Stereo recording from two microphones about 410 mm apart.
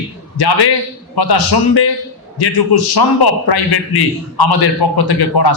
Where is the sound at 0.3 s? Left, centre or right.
Left.